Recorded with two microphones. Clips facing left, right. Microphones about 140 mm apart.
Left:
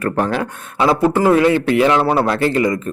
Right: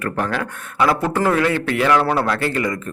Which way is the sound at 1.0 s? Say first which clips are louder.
Left 5 dB; 15° left (ahead or behind).